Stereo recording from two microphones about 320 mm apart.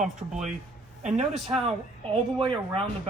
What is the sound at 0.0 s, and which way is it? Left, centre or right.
Speech, centre.